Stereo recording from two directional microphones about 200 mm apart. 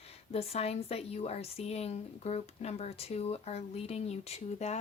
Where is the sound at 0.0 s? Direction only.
30° left (ahead or behind).